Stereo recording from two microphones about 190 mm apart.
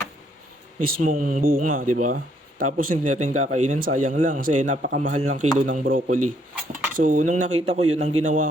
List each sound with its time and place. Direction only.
0.8 s speech: 50° right (ahead or behind)